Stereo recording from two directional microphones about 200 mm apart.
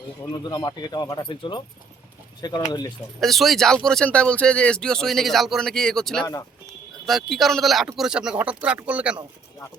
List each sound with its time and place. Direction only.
0.4 s speech: 20° left (ahead or behind)
3.2 s speech: centre (ahead or behind)